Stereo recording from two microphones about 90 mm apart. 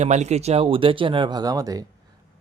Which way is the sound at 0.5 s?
85° right.